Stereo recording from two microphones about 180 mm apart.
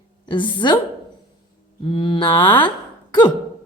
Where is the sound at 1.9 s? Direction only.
30° left (ahead or behind).